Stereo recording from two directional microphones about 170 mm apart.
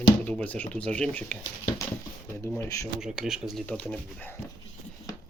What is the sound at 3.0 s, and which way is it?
Speech, 5° right (ahead or behind).